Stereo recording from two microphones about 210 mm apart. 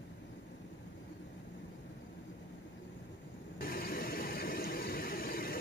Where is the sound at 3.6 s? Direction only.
45° left (ahead or behind).